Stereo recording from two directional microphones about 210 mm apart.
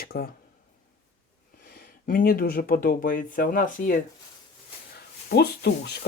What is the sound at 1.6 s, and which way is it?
Speech, 45° left (ahead or behind).